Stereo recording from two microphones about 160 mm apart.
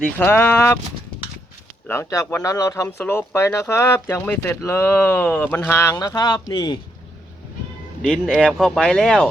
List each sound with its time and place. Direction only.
0.0 s speech: 10° left (ahead or behind)
1.9 s speech: 20° left (ahead or behind)
8.0 s speech: 5° left (ahead or behind)